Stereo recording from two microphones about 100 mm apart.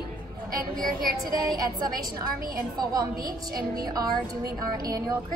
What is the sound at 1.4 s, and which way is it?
Speech, 40° right (ahead or behind).